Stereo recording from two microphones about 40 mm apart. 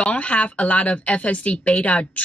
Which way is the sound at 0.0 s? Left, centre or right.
Left.